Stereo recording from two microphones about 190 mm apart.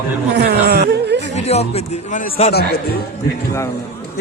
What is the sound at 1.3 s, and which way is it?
A man's voice, 35° left (ahead or behind).